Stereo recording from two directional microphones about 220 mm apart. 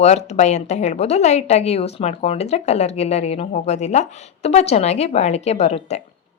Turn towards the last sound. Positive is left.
turn(degrees=30)  # may be behind; listen again after turning